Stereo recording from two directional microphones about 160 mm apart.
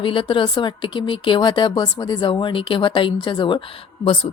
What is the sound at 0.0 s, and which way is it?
Speech, 30° left (ahead or behind).